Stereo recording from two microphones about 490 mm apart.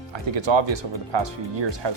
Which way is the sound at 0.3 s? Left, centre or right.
Right.